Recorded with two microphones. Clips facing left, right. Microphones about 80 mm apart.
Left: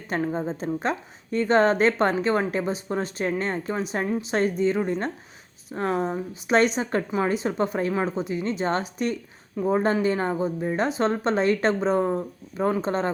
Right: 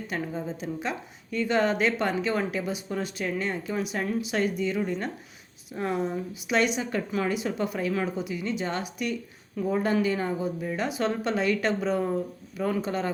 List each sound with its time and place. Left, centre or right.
0.1 s a woman's voice: left